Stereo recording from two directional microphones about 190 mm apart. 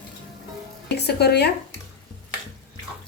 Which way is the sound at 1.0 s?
60° left (ahead or behind).